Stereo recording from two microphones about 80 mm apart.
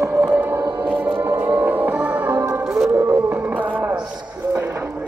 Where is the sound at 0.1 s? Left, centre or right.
Centre.